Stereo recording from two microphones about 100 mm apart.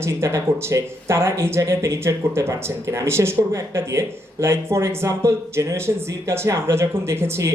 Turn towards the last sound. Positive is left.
turn(degrees=-25)  # may be behind; listen again after turning